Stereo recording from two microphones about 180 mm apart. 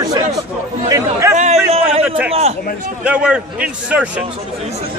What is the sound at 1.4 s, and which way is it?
Speech, 40° right (ahead or behind).